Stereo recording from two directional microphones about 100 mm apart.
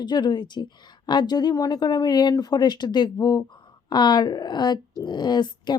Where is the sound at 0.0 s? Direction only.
45° left (ahead or behind).